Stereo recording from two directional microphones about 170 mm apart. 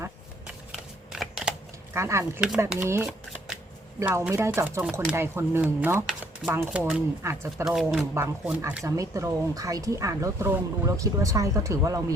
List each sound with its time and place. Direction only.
1.1 s a sound: 5° right (ahead or behind)
1.9 s speech: 15° right (ahead or behind)
8.8 s speech: 20° right (ahead or behind)